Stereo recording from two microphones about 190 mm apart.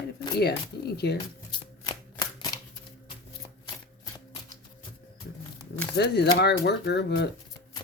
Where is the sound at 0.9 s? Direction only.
60° left (ahead or behind).